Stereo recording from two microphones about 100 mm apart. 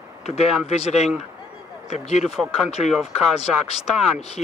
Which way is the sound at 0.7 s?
90° left.